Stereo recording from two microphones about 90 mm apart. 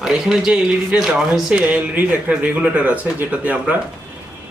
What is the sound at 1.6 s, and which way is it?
Speech, 20° right (ahead or behind).